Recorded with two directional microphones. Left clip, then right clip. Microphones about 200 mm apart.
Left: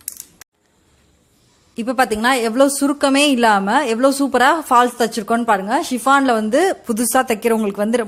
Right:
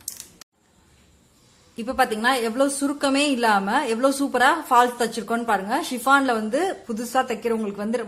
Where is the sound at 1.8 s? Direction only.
30° left (ahead or behind).